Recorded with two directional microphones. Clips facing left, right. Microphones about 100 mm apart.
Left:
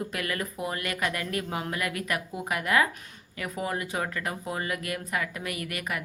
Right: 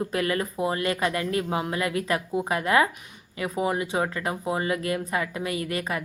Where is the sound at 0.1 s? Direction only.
30° right (ahead or behind).